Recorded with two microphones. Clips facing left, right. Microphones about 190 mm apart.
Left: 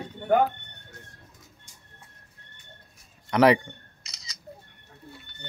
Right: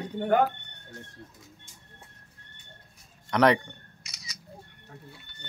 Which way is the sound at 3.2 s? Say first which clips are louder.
Left 3 dB; 5° left (ahead or behind).